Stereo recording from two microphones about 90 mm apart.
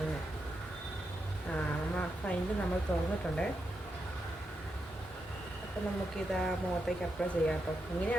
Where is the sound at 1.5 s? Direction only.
15° left (ahead or behind).